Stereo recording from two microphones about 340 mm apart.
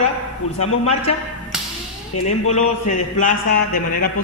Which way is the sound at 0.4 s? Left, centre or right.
Left.